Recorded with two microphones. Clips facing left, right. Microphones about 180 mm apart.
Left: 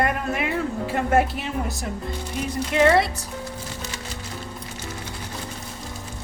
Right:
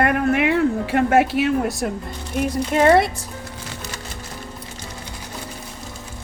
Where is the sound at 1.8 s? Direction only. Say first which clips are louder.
Right 6 dB; 60° right (ahead or behind).